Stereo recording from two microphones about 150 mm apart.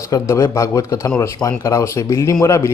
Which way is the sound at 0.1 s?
20° left (ahead or behind).